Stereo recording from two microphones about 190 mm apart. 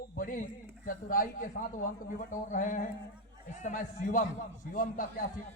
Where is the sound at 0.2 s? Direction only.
50° left (ahead or behind).